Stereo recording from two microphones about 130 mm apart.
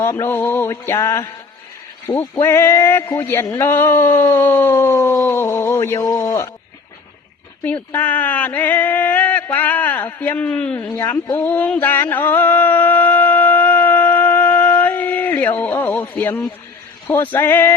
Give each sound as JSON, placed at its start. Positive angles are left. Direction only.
{"t": 0.0, "sound": "speech", "side_deg": 20}
{"t": 7.6, "sound": "speech", "side_deg": 15}
{"t": 11.3, "sound": "a sound", "side_deg": 15}